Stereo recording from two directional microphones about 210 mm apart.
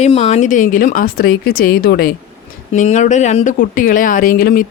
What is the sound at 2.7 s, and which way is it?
Speech, 35° left (ahead or behind).